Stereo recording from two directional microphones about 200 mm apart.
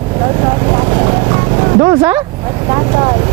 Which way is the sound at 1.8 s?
15° right (ahead or behind).